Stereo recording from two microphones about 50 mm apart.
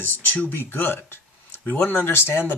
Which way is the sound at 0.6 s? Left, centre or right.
Left.